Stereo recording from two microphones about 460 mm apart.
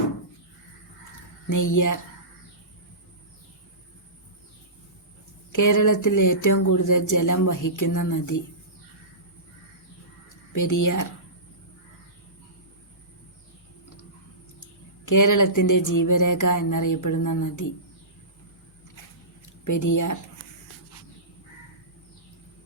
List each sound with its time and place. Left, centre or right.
1.5 s speech: left
5.5 s speech: left
10.5 s speech: left
15.0 s speech: left
19.6 s speech: left